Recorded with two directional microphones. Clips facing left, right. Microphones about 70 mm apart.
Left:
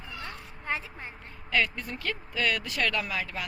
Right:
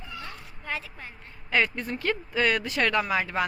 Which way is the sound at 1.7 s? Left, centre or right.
Right.